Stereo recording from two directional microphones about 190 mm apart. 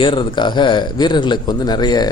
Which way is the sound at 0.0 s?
25° left (ahead or behind).